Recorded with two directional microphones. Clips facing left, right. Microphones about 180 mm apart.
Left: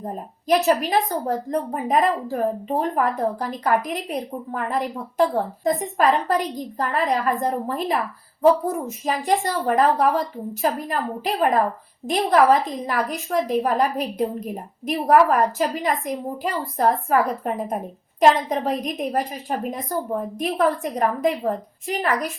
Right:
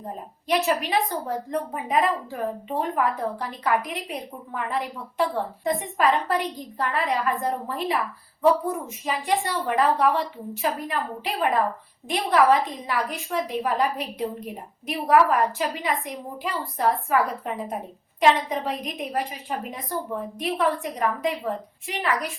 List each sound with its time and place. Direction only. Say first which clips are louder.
0.4 s a woman's voice: left 5 dB; 45° left (ahead or behind)